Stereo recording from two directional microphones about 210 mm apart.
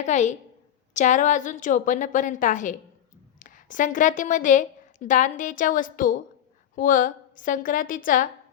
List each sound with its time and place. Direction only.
0.0 s a woman's voice: 35° left (ahead or behind)